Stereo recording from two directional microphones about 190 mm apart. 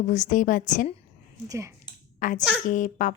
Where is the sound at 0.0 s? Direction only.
40° left (ahead or behind).